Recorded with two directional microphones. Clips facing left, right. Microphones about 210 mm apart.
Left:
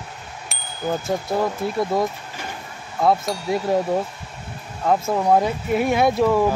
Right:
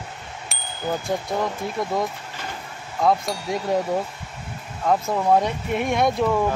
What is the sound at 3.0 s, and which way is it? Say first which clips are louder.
Speech: left 2 dB; centre (ahead or behind).